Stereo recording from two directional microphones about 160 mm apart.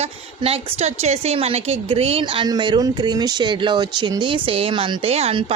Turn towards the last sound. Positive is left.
turn(degrees=-35)  # may be behind; listen again after turning